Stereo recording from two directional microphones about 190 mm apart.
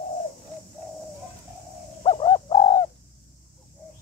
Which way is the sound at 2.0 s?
25° left (ahead or behind).